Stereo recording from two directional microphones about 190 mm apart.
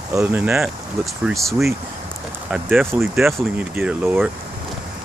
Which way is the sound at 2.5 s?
10° right (ahead or behind).